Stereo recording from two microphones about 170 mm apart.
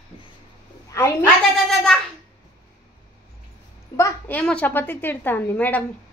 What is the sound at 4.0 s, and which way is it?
A woman's voice, 15° left (ahead or behind).